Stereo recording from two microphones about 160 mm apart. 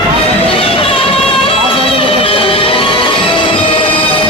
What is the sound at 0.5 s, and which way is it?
Music, 35° left (ahead or behind).